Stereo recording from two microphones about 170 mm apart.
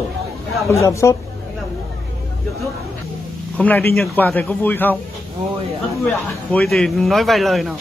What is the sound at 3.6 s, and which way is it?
A man's voice, 10° left (ahead or behind).